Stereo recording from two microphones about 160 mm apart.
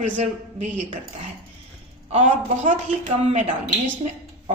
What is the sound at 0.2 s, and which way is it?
Speech, 45° right (ahead or behind).